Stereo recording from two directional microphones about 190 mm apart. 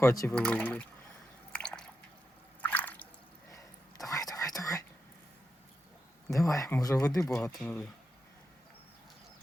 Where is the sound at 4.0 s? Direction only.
20° left (ahead or behind).